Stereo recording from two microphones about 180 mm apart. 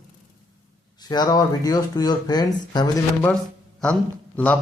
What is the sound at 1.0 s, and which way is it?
Speech, 20° left (ahead or behind).